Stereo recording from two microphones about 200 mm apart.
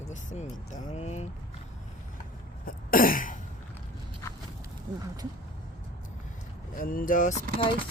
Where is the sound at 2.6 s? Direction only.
45° left (ahead or behind).